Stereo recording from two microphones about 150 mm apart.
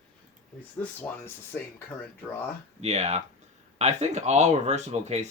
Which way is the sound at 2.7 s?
45° right (ahead or behind).